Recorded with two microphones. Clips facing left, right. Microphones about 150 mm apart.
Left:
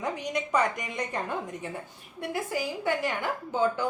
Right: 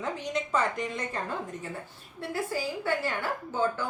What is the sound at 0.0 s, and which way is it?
A woman's voice, 15° left (ahead or behind).